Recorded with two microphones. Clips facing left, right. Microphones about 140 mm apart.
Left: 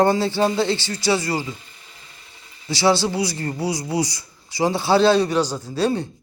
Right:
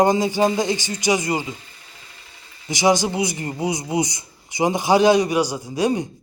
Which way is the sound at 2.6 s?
15° right (ahead or behind).